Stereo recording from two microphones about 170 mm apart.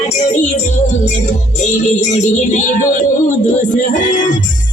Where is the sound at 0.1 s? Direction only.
45° left (ahead or behind).